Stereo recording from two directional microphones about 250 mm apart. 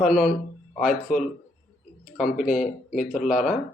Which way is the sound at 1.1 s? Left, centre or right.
Left.